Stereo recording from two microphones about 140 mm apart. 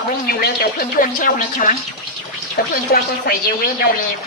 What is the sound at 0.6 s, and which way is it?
Speech, 90° left.